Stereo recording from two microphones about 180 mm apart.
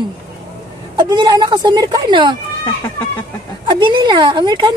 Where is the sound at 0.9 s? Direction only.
25° right (ahead or behind).